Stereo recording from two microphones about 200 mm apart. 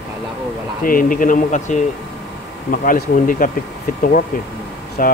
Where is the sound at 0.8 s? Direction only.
45° left (ahead or behind).